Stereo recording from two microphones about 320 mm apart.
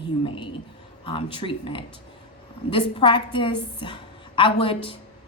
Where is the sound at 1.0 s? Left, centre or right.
Centre.